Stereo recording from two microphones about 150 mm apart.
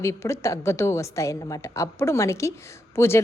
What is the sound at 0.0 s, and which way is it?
A woman's voice, 20° left (ahead or behind).